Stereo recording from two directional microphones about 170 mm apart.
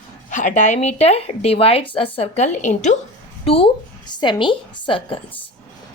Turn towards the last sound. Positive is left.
turn(degrees=30)  # may be behind; listen again after turning